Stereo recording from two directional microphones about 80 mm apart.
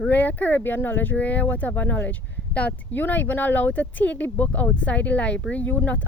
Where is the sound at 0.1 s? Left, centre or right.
Left.